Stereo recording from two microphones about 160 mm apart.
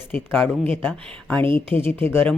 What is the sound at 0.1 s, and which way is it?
Speech, 10° left (ahead or behind).